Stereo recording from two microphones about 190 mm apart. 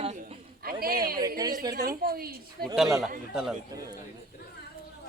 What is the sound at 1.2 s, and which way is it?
Speech, 20° right (ahead or behind).